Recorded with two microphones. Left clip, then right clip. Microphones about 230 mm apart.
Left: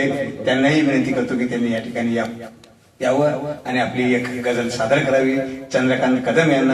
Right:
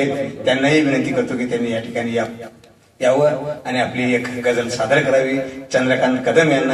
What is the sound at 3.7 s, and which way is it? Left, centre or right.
A man's voice, right.